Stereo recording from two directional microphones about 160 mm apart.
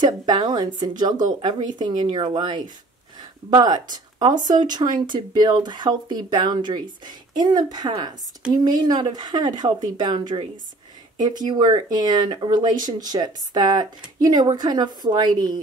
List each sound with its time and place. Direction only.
0.0 s speech: 25° right (ahead or behind)